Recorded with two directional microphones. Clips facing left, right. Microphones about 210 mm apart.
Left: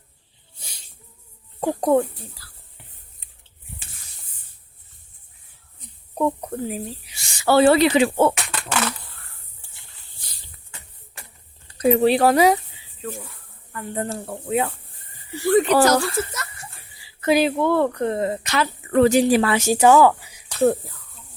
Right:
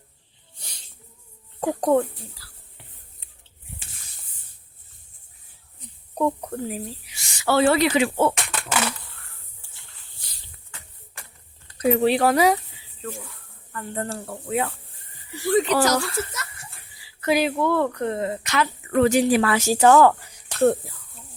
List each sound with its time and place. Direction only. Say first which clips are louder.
1.6 s speech: left 1 dB; 10° left (ahead or behind)
2.4 s dog: left 1 dB; 45° left (ahead or behind)
6.4 s speech: left 2 dB; 15° left (ahead or behind)
7.1 s speech: left 4 dB; 30° left (ahead or behind)
11.8 s speech: left 3 dB; 35° left (ahead or behind)
13.0 s speech: left 2 dB; 10° left (ahead or behind)
15.4 s speech: left 4 dB; 55° left (ahead or behind)
16.0 s speech: left 3 dB; 40° left (ahead or behind)
17.2 s speech: left 3 dB; 25° left (ahead or behind); by 20.7 s 5° left (ahead or behind)